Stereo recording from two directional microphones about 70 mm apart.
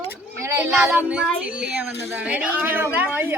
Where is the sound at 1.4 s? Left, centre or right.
Centre.